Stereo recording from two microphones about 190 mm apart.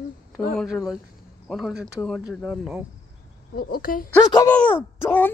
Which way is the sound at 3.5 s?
50° left (ahead or behind).